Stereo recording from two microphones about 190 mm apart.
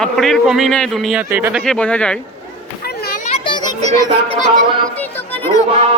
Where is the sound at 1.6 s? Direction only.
5° left (ahead or behind).